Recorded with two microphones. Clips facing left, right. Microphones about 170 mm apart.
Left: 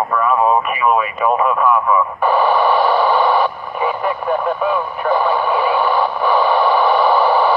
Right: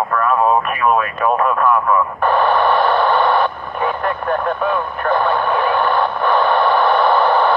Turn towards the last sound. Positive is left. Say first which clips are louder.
# even
turn(degrees=5)  # may be behind; listen again after turning